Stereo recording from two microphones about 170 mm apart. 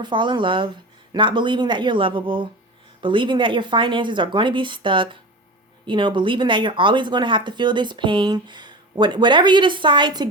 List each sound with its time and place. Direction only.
0.0 s speech: 25° right (ahead or behind)